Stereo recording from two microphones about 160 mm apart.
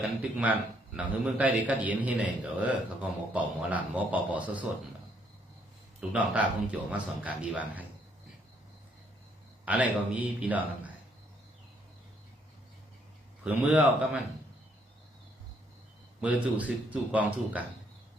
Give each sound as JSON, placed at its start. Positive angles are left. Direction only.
{"t": 0.0, "sound": "a man's voice", "side_deg": -5}
{"t": 6.0, "sound": "a man's voice", "side_deg": -10}
{"t": 9.6, "sound": "a man's voice", "side_deg": -10}
{"t": 13.4, "sound": "a man's voice", "side_deg": -10}
{"t": 16.2, "sound": "a man's voice", "side_deg": -10}